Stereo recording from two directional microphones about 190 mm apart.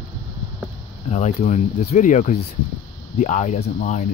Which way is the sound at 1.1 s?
35° left (ahead or behind).